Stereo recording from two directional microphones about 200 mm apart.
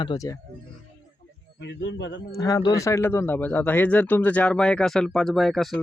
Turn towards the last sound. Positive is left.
turn(degrees=0)  # may be behind; listen again after turning